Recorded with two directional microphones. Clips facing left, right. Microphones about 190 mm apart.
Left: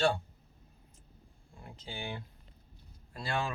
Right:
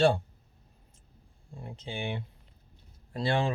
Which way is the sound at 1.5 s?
25° right (ahead or behind).